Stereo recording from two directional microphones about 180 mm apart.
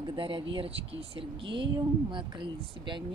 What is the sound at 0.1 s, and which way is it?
Speech, 30° right (ahead or behind).